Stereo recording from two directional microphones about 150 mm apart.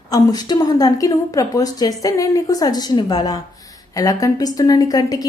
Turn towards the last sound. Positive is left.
turn(degrees=25)  # may be behind; listen again after turning